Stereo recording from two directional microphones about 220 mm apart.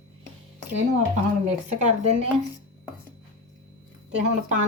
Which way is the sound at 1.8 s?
30° right (ahead or behind).